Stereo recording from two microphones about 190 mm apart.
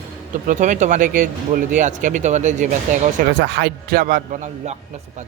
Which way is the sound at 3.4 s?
65° right (ahead or behind).